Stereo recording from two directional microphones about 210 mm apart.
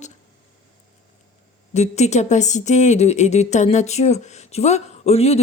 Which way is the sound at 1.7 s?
30° left (ahead or behind).